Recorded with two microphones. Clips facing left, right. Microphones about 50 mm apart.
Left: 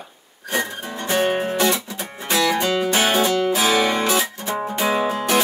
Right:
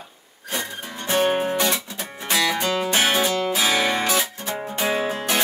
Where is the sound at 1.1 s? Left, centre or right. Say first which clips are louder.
Even; left.